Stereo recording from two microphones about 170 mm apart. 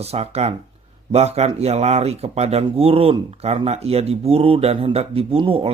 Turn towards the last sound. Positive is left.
turn(degrees=-35)  # may be behind; listen again after turning